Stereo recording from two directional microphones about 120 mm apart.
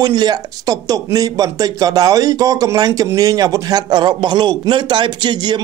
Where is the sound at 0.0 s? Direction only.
35° right (ahead or behind).